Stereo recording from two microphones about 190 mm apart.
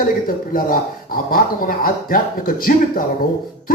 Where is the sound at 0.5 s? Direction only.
50° left (ahead or behind).